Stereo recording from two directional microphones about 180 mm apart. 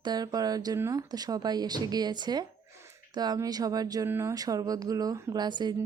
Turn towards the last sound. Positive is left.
turn(degrees=-25)  # may be behind; listen again after turning